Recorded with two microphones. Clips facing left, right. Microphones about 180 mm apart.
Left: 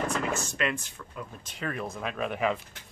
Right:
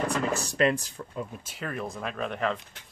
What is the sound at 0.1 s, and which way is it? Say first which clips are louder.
Speech: right 2 dB; 35° right (ahead or behind).